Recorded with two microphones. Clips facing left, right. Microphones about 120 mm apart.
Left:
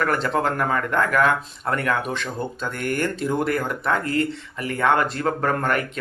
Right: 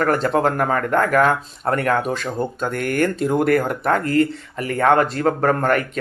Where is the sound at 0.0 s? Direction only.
40° right (ahead or behind).